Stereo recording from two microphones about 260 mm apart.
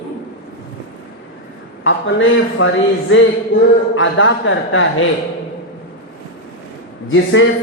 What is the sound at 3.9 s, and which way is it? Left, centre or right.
Speech, left.